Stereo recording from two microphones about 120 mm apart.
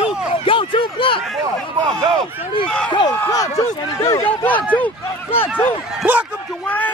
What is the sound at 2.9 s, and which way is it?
Speech, 40° left (ahead or behind).